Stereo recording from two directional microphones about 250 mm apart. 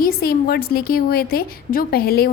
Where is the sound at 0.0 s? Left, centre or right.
Left.